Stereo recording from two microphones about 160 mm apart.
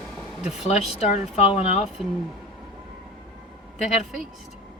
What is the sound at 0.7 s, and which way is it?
Speech, 45° left (ahead or behind).